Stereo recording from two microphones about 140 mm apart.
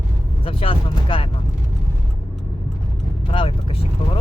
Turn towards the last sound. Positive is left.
turn(degrees=40)  # may be behind; listen again after turning